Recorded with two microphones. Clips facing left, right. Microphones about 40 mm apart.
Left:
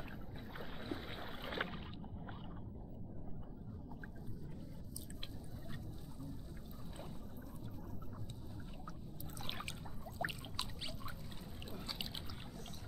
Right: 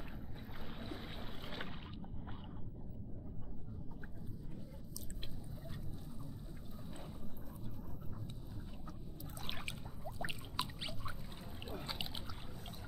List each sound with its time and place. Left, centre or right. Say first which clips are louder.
0.7 s boat: left 1 dB; centre
1.2 s boat: left 4 dB; left
9.4 s a sound: even; centre
11.6 s boat: right 2 dB; right